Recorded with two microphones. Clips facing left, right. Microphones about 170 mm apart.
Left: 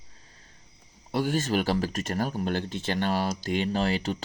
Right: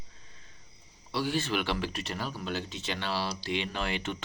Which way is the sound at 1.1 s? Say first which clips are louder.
Left 4 dB; 45° left (ahead or behind).